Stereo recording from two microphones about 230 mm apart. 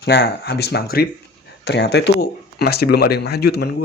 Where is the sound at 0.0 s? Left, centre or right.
Left.